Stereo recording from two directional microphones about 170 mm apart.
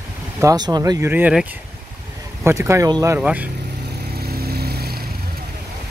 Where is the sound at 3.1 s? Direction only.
10° right (ahead or behind).